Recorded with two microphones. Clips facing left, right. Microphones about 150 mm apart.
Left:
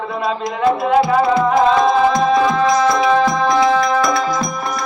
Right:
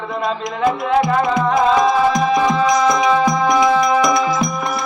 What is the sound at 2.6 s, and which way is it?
Music, 15° right (ahead or behind).